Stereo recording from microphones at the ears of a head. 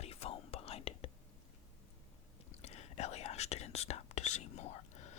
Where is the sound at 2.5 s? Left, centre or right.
Left.